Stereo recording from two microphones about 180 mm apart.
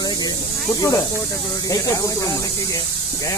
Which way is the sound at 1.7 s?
20° left (ahead or behind).